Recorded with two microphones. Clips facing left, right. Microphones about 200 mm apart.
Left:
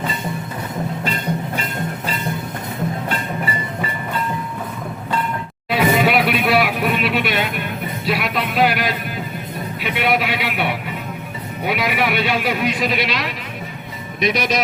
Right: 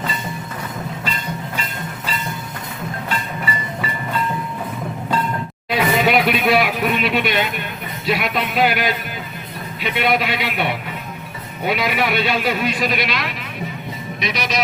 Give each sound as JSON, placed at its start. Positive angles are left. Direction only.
{"t": 5.7, "sound": "a sound", "side_deg": 5}
{"t": 8.0, "sound": "music", "side_deg": 5}
{"t": 9.8, "sound": "a man's voice", "side_deg": 10}
{"t": 14.2, "sound": "speech", "side_deg": 50}